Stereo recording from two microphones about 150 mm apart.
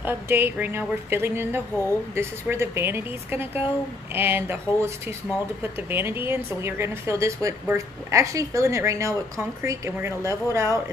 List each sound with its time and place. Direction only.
0.0 s a woman's voice: 15° right (ahead or behind)